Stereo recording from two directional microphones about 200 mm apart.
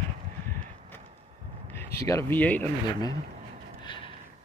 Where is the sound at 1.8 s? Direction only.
15° left (ahead or behind).